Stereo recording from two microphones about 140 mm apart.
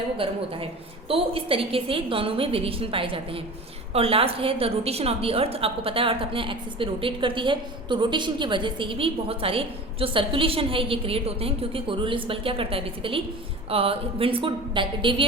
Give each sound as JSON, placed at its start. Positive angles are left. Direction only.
{"t": 0.2, "sound": "a woman's voice", "side_deg": -40}